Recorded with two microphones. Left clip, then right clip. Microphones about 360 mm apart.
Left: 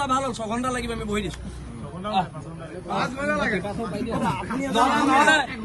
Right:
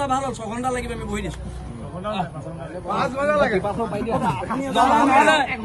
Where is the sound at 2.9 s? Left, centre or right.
Centre.